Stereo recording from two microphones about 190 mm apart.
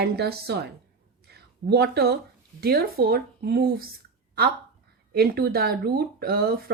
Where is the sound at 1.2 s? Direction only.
60° right (ahead or behind).